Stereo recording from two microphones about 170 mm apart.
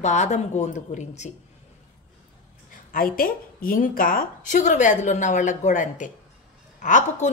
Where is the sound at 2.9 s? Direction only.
55° left (ahead or behind).